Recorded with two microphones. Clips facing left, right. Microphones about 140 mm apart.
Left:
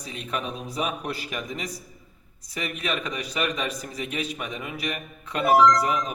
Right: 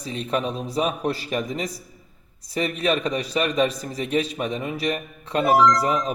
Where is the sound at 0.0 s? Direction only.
35° right (ahead or behind).